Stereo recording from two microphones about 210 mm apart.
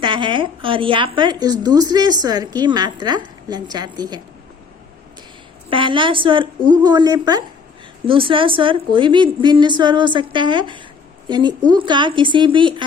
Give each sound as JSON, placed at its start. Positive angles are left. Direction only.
{"t": 0.0, "sound": "a woman's voice", "side_deg": -20}
{"t": 5.7, "sound": "a woman's voice", "side_deg": -25}